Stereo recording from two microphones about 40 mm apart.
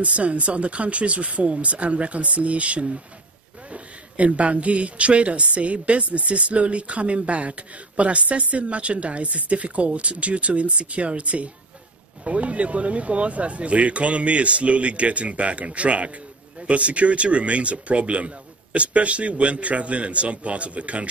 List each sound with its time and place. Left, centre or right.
0.0 s speech: right